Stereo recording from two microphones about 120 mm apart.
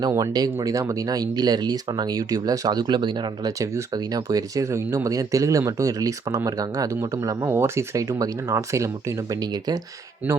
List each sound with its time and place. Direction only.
0.2 s speech: 30° right (ahead or behind)
3.6 s speech: 25° right (ahead or behind)